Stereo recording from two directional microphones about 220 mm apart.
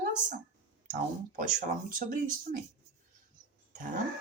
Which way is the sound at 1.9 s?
35° right (ahead or behind).